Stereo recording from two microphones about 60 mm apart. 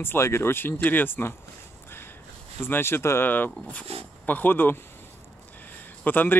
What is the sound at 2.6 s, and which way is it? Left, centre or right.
Speech, left.